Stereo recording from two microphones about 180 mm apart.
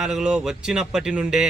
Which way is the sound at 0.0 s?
Centre (ahead or behind).